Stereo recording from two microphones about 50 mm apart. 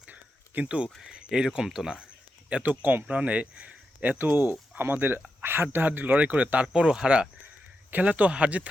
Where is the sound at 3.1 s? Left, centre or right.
Right.